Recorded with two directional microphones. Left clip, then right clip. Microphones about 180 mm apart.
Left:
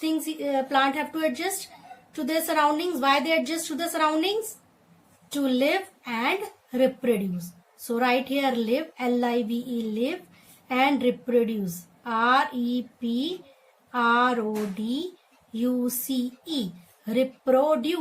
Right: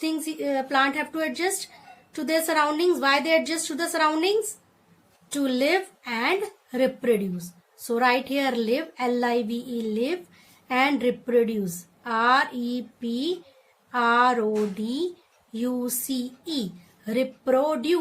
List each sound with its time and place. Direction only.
0.0 s a woman's voice: 35° right (ahead or behind)
5.3 s a woman's voice: 40° right (ahead or behind)